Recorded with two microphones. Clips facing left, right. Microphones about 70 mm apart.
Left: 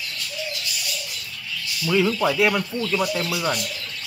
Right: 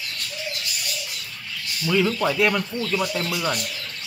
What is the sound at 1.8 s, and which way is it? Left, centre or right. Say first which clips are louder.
Speech: left 1 dB; centre.